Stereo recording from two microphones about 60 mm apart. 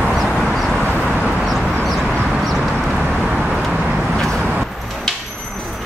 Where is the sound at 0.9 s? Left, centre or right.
Centre.